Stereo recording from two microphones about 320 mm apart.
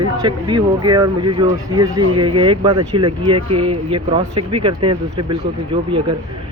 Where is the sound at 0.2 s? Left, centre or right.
Centre.